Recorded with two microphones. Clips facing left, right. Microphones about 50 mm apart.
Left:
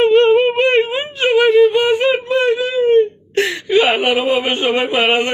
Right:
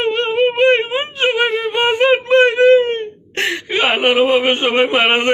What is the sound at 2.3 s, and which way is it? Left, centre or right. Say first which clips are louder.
Whimper: right 6 dB; right.